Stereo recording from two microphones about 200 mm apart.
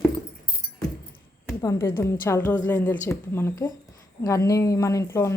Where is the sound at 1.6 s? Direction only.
15° left (ahead or behind).